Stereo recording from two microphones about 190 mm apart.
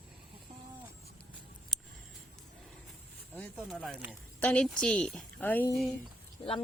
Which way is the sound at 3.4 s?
Centre (ahead or behind).